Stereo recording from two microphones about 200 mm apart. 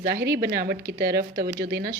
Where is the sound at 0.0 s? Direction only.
50° right (ahead or behind).